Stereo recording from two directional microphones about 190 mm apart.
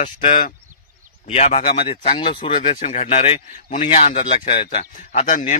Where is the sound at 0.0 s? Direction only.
35° left (ahead or behind).